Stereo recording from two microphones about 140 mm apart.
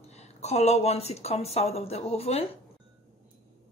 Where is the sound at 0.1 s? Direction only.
50° left (ahead or behind).